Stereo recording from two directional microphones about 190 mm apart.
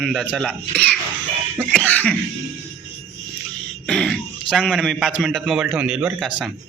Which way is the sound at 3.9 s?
5° left (ahead or behind).